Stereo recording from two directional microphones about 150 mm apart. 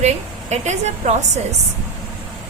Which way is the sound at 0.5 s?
50° right (ahead or behind).